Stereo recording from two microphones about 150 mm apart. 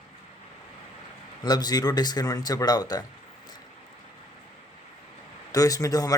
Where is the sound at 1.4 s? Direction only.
25° left (ahead or behind).